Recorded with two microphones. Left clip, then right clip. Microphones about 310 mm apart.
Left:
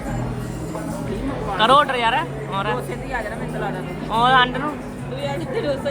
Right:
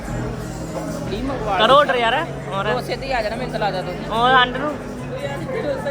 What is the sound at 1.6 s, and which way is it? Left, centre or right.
Speech, centre.